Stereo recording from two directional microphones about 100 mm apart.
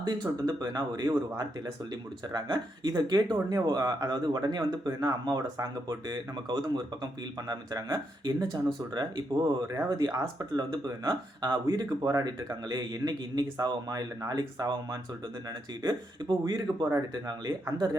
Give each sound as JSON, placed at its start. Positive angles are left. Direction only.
{"t": 0.0, "sound": "speech", "side_deg": -45}
{"t": 16.4, "sound": "speech", "side_deg": -45}